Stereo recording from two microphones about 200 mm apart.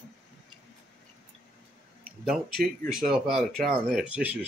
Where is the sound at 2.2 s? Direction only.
Centre (ahead or behind).